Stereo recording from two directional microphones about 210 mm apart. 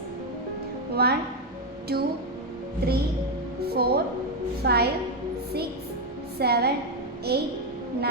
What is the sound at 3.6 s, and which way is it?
A woman's voice, 50° right (ahead or behind).